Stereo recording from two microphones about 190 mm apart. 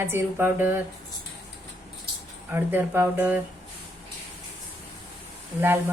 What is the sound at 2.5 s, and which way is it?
Speech, 10° right (ahead or behind).